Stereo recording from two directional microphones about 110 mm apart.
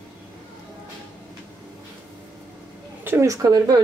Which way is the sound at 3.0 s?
20° right (ahead or behind).